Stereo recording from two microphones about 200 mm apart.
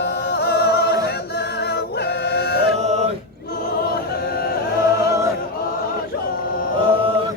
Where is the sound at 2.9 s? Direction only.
35° right (ahead or behind).